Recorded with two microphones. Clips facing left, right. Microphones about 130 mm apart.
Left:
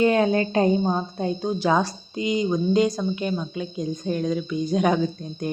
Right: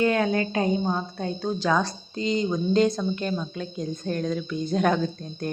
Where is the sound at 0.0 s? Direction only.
25° left (ahead or behind).